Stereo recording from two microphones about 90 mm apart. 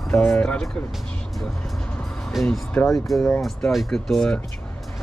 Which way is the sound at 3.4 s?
Centre (ahead or behind).